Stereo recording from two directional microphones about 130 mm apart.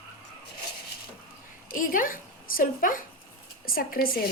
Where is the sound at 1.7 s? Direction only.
90° left.